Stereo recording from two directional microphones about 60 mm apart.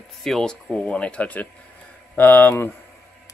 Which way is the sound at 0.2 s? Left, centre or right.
Centre.